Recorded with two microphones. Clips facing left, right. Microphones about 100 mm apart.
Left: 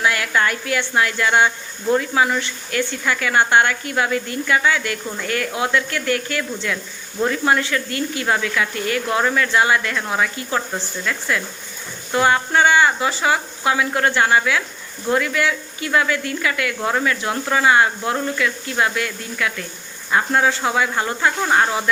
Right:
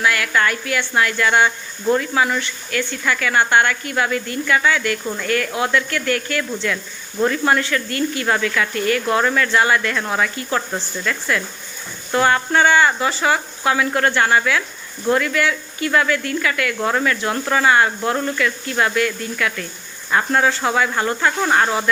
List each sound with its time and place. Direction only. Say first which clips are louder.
0.0 s speech: right 1 dB; 20° left (ahead or behind)